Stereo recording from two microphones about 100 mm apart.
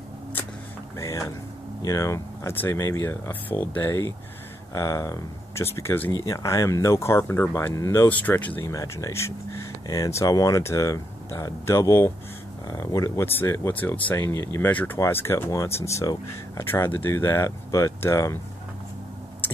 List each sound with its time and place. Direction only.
0.9 s speech: 30° left (ahead or behind)
6.1 s speech: 35° left (ahead or behind)
8.1 s speech: 15° left (ahead or behind)
8.6 s speech: 30° left (ahead or behind)
13.2 s speech: 20° left (ahead or behind)
19.4 s tick-tock: 20° left (ahead or behind)